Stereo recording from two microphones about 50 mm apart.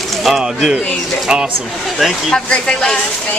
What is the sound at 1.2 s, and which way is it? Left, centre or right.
Speech, centre.